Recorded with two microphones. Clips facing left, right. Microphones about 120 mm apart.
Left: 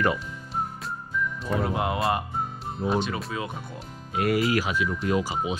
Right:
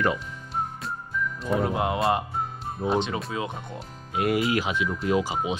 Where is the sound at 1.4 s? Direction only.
Centre (ahead or behind).